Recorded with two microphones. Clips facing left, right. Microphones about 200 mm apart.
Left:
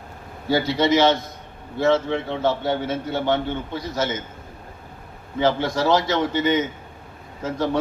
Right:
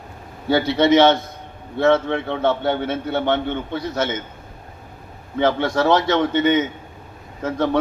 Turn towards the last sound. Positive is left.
turn(degrees=-60)  # may be behind; listen again after turning